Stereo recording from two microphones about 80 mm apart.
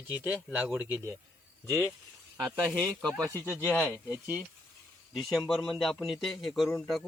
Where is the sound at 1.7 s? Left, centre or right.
Right.